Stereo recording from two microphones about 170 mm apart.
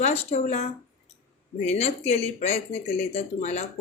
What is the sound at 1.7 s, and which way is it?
Speech, 40° left (ahead or behind).